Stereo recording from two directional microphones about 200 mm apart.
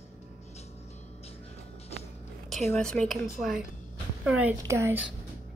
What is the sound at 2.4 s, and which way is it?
A woman's voice, centre (ahead or behind).